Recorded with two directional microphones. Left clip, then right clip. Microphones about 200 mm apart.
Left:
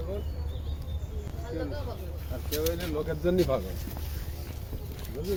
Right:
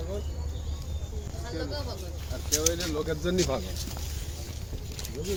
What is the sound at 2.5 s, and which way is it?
Speech, 25° left (ahead or behind).